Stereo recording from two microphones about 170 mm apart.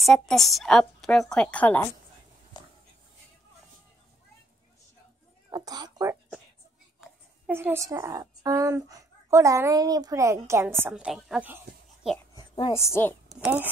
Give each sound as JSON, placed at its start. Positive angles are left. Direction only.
{"t": 0.0, "sound": "a woman's voice", "side_deg": 0}
{"t": 5.5, "sound": "speech", "side_deg": -25}
{"t": 7.0, "sound": "a woman's voice", "side_deg": -10}
{"t": 12.4, "sound": "a sound", "side_deg": 30}
{"t": 12.7, "sound": "a woman's voice", "side_deg": 15}
{"t": 13.4, "sound": "speech", "side_deg": -10}